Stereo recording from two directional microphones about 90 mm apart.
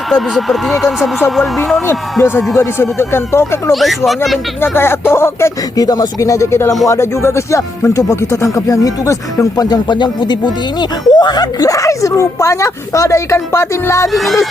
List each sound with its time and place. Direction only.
0.1 s speech: centre (ahead or behind)
2.6 s speech: 25° left (ahead or behind)
3.7 s speech: centre (ahead or behind)
4.6 s speech: 25° left (ahead or behind)
8.5 s speech: 40° left (ahead or behind)
14.1 s speech: centre (ahead or behind)